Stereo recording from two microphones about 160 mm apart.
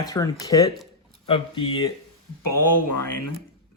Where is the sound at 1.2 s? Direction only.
35° left (ahead or behind).